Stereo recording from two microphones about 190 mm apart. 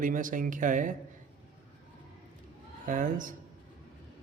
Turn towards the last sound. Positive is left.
turn(degrees=-45)  # may be behind; listen again after turning